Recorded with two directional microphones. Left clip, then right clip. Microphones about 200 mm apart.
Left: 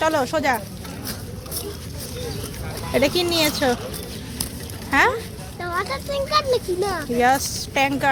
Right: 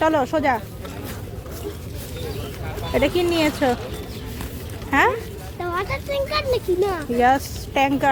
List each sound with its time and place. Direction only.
0.0 s a child's voice: 15° right (ahead or behind)
2.9 s a child's voice: 5° right (ahead or behind)
4.9 s a child's voice: 15° right (ahead or behind)